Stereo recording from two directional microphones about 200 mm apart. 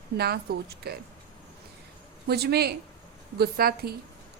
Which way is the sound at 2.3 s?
55° right (ahead or behind).